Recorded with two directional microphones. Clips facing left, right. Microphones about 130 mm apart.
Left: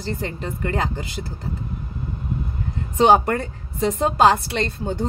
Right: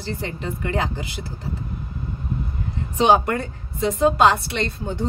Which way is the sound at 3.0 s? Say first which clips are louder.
Left 2 dB; 45° left (ahead or behind).